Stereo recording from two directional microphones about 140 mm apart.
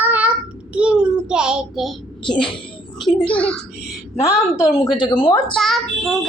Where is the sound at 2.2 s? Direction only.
35° left (ahead or behind).